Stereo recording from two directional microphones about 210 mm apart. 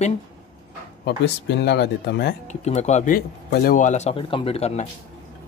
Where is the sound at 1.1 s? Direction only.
55° left (ahead or behind).